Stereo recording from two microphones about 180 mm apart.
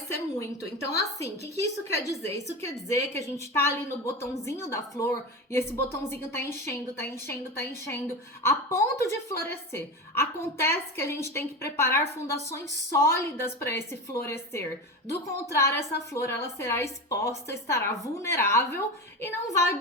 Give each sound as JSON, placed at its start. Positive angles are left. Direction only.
{"t": 0.1, "sound": "a woman's voice", "side_deg": 15}